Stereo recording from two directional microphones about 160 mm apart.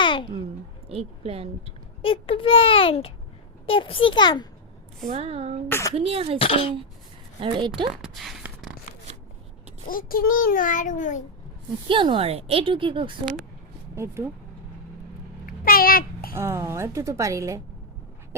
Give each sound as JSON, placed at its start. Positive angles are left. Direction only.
{"t": 0.0, "sound": "a sound", "side_deg": 30}
{"t": 0.9, "sound": "a woman's voice", "side_deg": -40}
{"t": 2.0, "sound": "a child's voice", "side_deg": 35}
{"t": 5.0, "sound": "a woman's voice", "side_deg": -40}
{"t": 5.6, "sound": "a woman's voice", "side_deg": 15}
{"t": 5.9, "sound": "a woman's voice", "side_deg": -35}
{"t": 6.4, "sound": "a child's voice", "side_deg": 35}
{"t": 7.3, "sound": "a woman's voice", "side_deg": -30}
{"t": 7.9, "sound": "speech", "side_deg": 0}
{"t": 9.9, "sound": "child singing", "side_deg": 65}
{"t": 11.9, "sound": "a woman's voice", "side_deg": -30}
{"t": 13.9, "sound": "speech", "side_deg": -15}
{"t": 15.4, "sound": "a sound", "side_deg": 65}
{"t": 16.3, "sound": "a woman's voice", "side_deg": -15}